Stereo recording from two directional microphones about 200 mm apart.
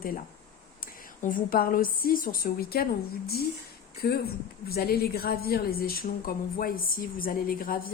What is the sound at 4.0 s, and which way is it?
A woman's voice, 50° left (ahead or behind).